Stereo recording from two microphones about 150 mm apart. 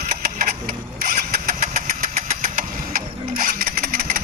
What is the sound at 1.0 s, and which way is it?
Engine, 65° right (ahead or behind).